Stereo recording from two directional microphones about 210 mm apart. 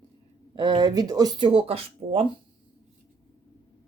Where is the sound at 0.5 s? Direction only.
20° right (ahead or behind).